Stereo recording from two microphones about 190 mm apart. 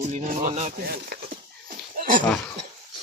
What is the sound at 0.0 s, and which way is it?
Speech, 40° right (ahead or behind).